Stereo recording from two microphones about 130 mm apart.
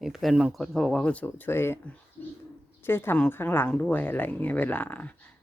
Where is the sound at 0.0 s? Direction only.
Centre (ahead or behind); by 1.8 s 20° left (ahead or behind).